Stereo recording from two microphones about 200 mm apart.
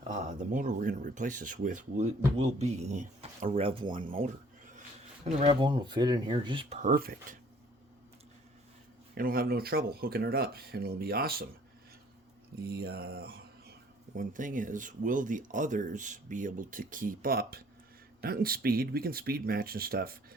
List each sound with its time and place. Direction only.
0.1 s speech: 40° right (ahead or behind)
4.1 s a sound: 45° right (ahead or behind)
5.4 s speech: 30° right (ahead or behind)
6.7 s speech: 45° right (ahead or behind)
9.1 s speech: 45° right (ahead or behind)
12.5 s a sound: 50° right (ahead or behind)
14.2 s speech: 40° right (ahead or behind)